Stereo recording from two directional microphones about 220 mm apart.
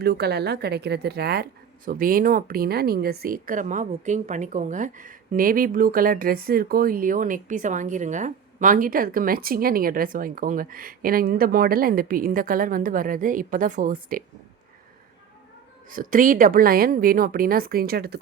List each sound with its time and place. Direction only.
0.0 s speech: 45° right (ahead or behind)
15.9 s speech: 40° right (ahead or behind)